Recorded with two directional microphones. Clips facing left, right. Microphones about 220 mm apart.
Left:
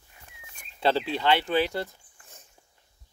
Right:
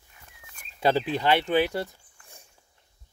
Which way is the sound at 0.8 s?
10° right (ahead or behind).